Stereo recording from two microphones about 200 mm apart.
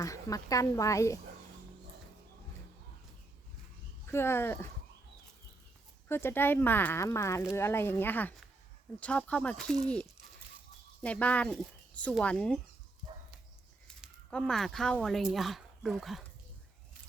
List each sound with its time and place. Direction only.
0.0 s speech: 15° left (ahead or behind)
4.0 s speech: 10° left (ahead or behind)
6.1 s speech: 10° left (ahead or behind)
13.8 s speech: 5° left (ahead or behind)